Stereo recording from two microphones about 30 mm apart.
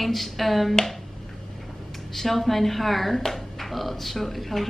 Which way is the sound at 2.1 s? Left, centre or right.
Centre.